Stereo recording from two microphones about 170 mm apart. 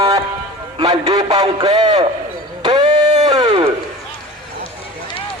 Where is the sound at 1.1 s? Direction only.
25° right (ahead or behind).